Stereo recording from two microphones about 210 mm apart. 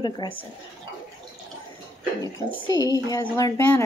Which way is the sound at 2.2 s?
15° left (ahead or behind).